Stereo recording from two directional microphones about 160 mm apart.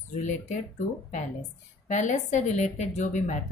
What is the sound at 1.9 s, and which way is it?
A woman's voice, 50° left (ahead or behind).